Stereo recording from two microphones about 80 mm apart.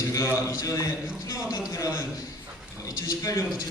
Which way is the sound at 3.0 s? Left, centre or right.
Left.